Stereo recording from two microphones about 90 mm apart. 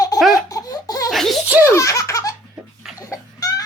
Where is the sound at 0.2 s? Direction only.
Centre (ahead or behind).